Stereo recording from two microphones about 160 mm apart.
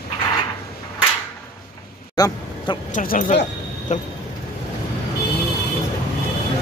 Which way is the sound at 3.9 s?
50° left (ahead or behind).